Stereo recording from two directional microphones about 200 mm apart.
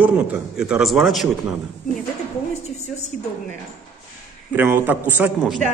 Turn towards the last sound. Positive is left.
turn(degrees=0)  # may be behind; listen again after turning